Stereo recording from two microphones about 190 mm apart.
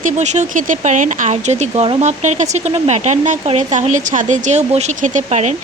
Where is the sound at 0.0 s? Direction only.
40° right (ahead or behind).